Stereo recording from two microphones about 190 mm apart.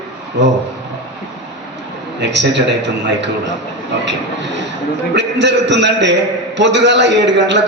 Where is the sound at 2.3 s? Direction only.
65° right (ahead or behind).